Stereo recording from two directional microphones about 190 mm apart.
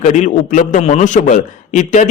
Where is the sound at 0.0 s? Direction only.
40° left (ahead or behind).